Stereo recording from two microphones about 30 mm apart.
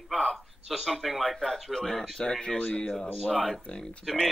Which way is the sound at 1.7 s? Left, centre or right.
Centre.